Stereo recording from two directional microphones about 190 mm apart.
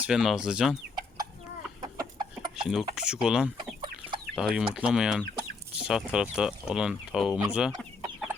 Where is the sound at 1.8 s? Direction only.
20° right (ahead or behind).